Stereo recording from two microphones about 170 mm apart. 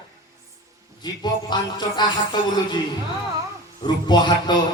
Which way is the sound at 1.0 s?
25° left (ahead or behind).